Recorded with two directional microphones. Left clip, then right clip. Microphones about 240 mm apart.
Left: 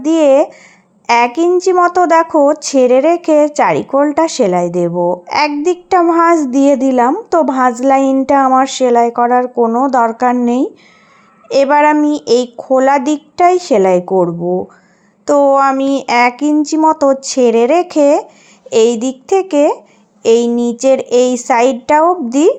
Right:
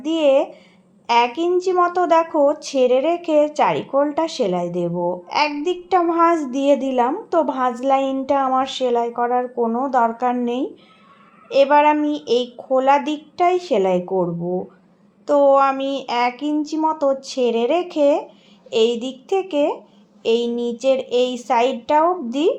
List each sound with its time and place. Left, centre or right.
0.0 s speech: left